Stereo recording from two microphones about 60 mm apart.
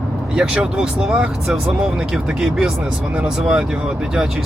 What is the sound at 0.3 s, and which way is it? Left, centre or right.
Speech, centre.